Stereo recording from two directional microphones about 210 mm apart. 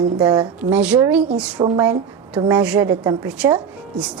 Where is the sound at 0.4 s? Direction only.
5° right (ahead or behind).